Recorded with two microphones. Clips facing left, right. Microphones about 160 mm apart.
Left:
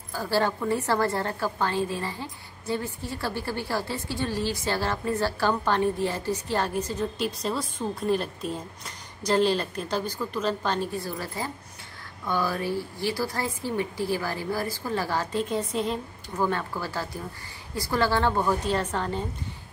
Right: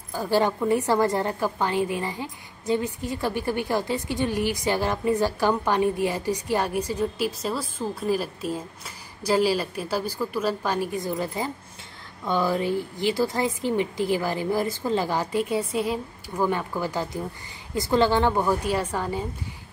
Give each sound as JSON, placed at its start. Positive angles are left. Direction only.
{"t": 0.1, "sound": "a woman's voice", "side_deg": -20}